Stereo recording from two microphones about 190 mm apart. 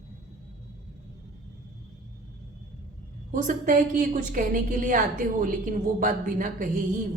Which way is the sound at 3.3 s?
45° right (ahead or behind).